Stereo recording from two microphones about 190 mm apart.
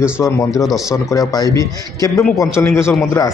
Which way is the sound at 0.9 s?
15° left (ahead or behind).